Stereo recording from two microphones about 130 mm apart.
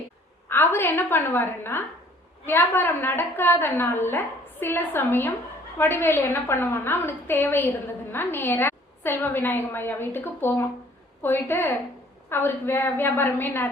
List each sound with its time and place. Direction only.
0.4 s a woman's voice: 15° left (ahead or behind)